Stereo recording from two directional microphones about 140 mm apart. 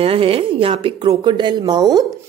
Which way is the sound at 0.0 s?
40° right (ahead or behind).